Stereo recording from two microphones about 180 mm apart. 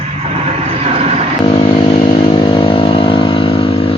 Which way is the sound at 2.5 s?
30° left (ahead or behind).